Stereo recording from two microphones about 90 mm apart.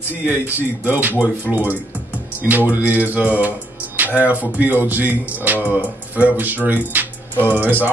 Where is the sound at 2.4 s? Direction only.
20° right (ahead or behind).